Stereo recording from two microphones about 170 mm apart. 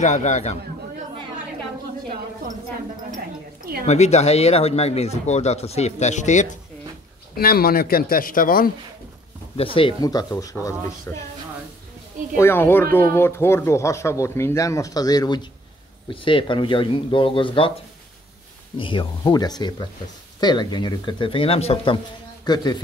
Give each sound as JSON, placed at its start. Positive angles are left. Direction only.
{"t": 0.0, "sound": "a man's voice", "side_deg": 45}
{"t": 3.8, "sound": "speech", "side_deg": 40}
{"t": 7.3, "sound": "speech", "side_deg": 65}
{"t": 9.8, "sound": "speech", "side_deg": 25}
{"t": 12.4, "sound": "speech", "side_deg": 15}
{"t": 18.8, "sound": "speech", "side_deg": 30}